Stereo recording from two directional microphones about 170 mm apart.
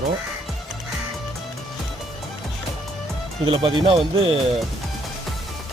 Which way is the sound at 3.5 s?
35° right (ahead or behind).